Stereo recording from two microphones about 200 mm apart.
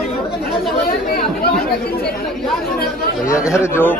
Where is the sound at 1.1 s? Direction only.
50° left (ahead or behind).